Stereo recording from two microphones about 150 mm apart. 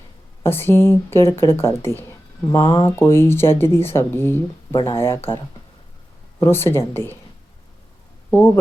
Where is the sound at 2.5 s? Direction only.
35° left (ahead or behind).